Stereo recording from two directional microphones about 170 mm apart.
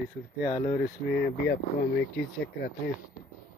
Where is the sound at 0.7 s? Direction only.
70° left (ahead or behind).